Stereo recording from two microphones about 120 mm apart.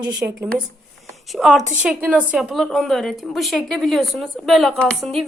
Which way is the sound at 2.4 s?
Centre (ahead or behind).